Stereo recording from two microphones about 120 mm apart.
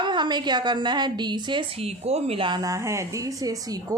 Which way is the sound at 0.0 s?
40° right (ahead or behind).